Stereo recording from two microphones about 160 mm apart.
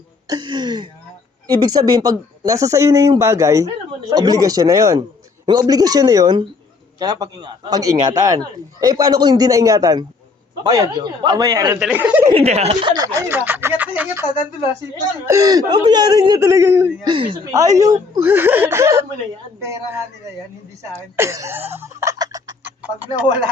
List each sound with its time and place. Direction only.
0.3 s speech: 25° right (ahead or behind)
11.9 s speech: 10° right (ahead or behind)
12.3 s speech: 40° right (ahead or behind)
12.9 s speech: 25° right (ahead or behind)
15.3 s speech: 20° right (ahead or behind)
17.1 s speech: 30° right (ahead or behind)
17.7 s speech: 20° right (ahead or behind)
21.2 s cough: 15° right (ahead or behind)